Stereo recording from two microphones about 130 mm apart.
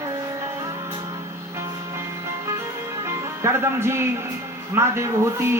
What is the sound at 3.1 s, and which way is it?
A man's voice, 20° right (ahead or behind).